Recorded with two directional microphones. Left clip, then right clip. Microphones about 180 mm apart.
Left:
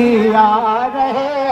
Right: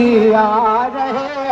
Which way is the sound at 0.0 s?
10° left (ahead or behind).